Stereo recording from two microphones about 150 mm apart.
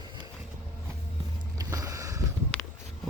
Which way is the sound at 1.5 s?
20° right (ahead or behind).